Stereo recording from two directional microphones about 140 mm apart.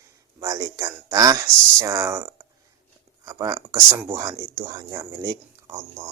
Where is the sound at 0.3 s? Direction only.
30° right (ahead or behind).